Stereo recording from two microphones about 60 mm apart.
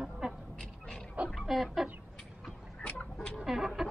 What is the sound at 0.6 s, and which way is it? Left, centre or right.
Bow-wow, centre.